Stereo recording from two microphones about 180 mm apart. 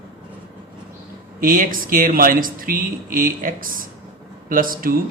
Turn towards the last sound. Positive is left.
turn(degrees=-50)  # may be behind; listen again after turning